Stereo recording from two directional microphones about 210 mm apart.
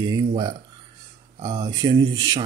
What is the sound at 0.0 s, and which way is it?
Speech, 20° right (ahead or behind).